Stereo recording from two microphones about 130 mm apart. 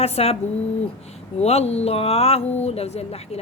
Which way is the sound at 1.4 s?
55° left (ahead or behind).